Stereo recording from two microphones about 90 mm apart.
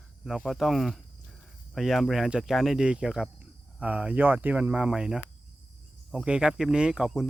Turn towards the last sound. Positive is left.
turn(degrees=-5)  # may be behind; listen again after turning